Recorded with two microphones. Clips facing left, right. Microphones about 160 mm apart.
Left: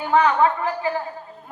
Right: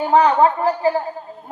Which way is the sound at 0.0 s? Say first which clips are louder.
Right 4 dB; 35° right (ahead or behind).